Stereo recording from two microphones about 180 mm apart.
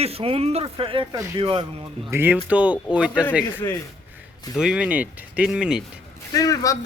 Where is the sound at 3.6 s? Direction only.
15° left (ahead or behind).